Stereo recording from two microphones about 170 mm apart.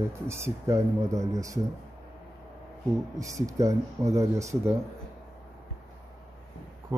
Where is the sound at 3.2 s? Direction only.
20° right (ahead or behind).